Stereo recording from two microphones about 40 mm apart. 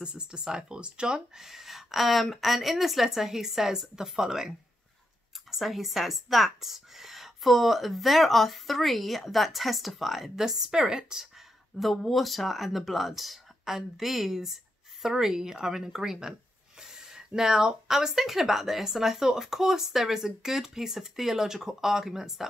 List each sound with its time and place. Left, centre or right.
0.0 s speech: right
1.4 s a woman's voice: centre
5.5 s a woman's voice: centre
11.8 s a woman's voice: centre